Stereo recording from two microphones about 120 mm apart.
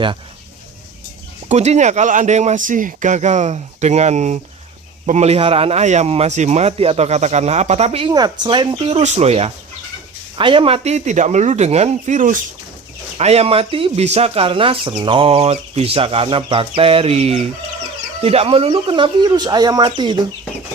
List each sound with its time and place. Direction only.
1.5 s speech: 65° right (ahead or behind)
8.1 s speech: 40° right (ahead or behind); by 9.5 s 60° right (ahead or behind)
10.3 s speech: 45° right (ahead or behind)
10.8 s speech: 70° right (ahead or behind); by 12.4 s 90° right
13.1 s speech: 60° right (ahead or behind); by 20.1 s 40° right (ahead or behind)